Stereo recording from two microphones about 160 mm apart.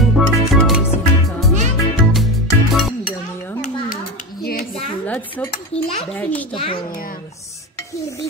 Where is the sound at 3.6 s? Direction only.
55° left (ahead or behind).